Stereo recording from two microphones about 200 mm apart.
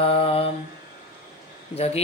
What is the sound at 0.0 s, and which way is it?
Mantra, 30° left (ahead or behind).